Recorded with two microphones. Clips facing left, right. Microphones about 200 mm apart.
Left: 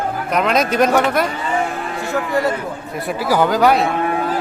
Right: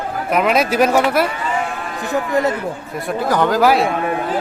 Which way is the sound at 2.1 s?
20° right (ahead or behind).